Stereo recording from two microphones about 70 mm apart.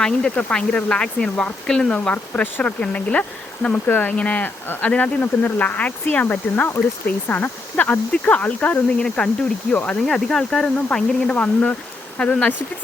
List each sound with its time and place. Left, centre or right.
0.0 s speech: centre
2.1 s speech: left
3.8 s speech: left
10.1 s speech: centre